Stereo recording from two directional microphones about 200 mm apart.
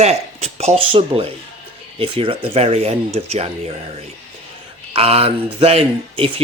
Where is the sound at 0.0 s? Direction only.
30° right (ahead or behind).